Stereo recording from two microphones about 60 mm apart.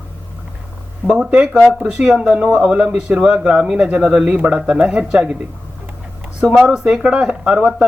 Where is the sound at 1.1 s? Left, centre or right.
Centre.